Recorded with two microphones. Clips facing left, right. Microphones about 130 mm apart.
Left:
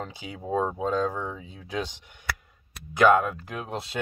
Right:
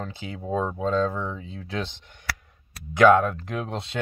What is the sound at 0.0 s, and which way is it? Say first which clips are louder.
Speech: right 2 dB; 10° left (ahead or behind).